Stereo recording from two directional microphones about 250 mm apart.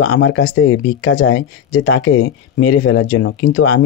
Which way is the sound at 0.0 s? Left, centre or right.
Left.